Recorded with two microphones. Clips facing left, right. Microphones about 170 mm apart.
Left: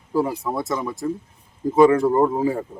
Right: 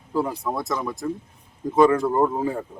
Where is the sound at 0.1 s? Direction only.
10° left (ahead or behind).